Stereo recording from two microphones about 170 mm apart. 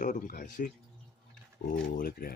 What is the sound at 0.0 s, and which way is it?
Speech, 50° left (ahead or behind).